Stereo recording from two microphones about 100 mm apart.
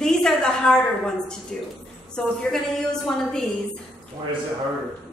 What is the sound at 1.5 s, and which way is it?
A woman's voice, 5° left (ahead or behind).